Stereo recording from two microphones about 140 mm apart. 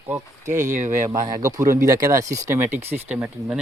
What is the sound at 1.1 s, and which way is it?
Speech, 25° right (ahead or behind).